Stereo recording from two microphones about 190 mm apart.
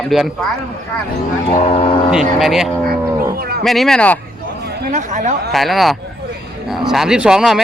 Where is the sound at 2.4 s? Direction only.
Centre (ahead or behind).